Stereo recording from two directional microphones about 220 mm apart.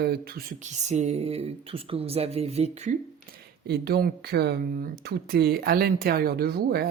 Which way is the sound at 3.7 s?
45° right (ahead or behind).